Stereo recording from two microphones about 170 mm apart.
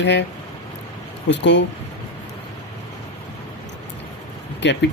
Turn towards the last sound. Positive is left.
turn(degrees=90)